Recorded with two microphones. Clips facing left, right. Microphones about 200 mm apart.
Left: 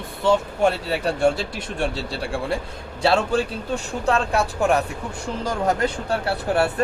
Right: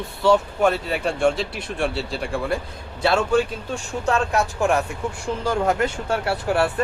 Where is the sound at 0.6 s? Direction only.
35° left (ahead or behind).